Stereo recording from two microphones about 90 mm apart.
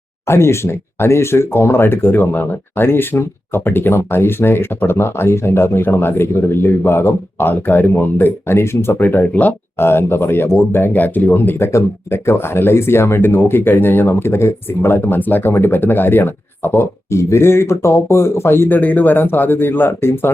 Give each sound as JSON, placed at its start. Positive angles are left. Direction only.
{"t": 0.3, "sound": "speech", "side_deg": 30}